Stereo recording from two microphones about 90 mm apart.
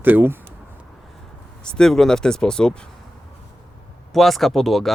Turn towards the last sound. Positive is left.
turn(degrees=0)  # may be behind; listen again after turning